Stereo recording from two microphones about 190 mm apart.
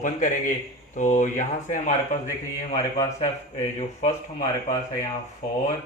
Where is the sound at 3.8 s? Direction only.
40° left (ahead or behind).